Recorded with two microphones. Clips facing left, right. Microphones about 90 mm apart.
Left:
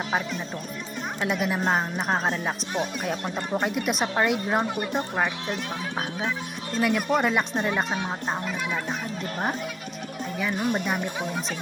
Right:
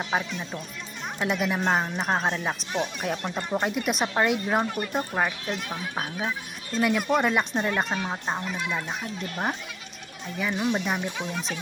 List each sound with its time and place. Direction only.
0.1 s speech: centre (ahead or behind)
4.9 s speech: 5° right (ahead or behind)
6.7 s speech: centre (ahead or behind)
10.5 s speech: 45° left (ahead or behind)